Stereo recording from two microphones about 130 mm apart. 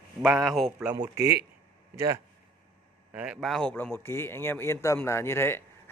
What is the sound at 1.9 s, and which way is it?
Speech, 20° right (ahead or behind).